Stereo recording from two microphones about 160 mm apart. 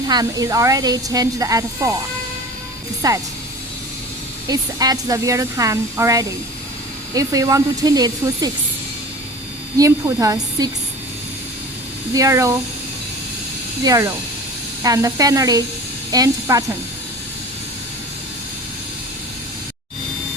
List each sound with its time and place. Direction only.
0.1 s speech: 25° right (ahead or behind)
3.0 s speech: 25° right (ahead or behind)
4.4 s speech: 25° right (ahead or behind)
9.7 s speech: 20° right (ahead or behind)
12.1 s speech: 20° right (ahead or behind)
13.8 s speech: 20° right (ahead or behind)